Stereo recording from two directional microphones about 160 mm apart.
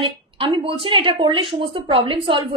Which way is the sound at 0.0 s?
30° right (ahead or behind).